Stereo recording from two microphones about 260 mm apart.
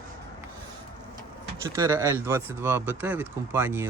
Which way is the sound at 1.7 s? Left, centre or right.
Centre.